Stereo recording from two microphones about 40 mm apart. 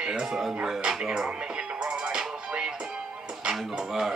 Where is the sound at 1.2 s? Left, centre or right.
Right.